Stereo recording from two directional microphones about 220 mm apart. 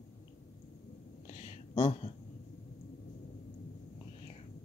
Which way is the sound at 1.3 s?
30° left (ahead or behind).